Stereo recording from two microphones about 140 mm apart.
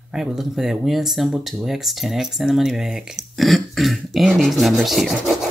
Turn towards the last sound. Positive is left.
turn(degrees=0)  # may be behind; listen again after turning